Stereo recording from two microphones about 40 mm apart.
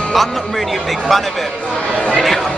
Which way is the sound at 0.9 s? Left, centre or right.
Centre.